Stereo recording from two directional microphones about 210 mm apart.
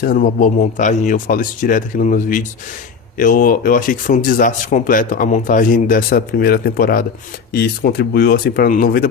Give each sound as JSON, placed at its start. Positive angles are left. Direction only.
{"t": 0.0, "sound": "speech", "side_deg": 45}